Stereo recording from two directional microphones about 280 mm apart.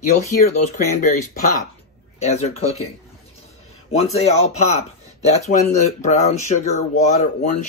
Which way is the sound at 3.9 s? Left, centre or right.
Left.